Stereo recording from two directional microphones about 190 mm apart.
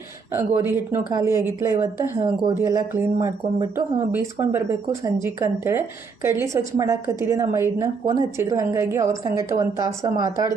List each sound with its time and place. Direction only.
0.3 s a woman's voice: 10° right (ahead or behind)